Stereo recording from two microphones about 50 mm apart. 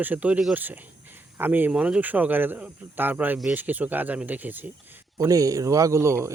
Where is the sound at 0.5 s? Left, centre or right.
Right.